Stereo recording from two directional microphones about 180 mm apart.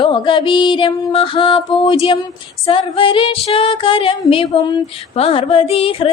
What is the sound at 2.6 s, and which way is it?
Female singing, 30° left (ahead or behind).